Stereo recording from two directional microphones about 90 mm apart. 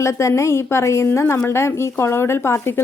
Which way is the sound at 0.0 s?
30° left (ahead or behind).